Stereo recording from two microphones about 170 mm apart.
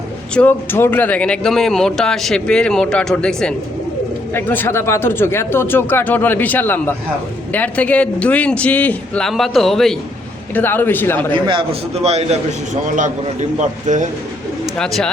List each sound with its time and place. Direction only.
0.3 s speech: 10° left (ahead or behind)
11.3 s a man's voice: 30° right (ahead or behind); by 14.1 s 45° right (ahead or behind)
14.8 s speech: 5° left (ahead or behind)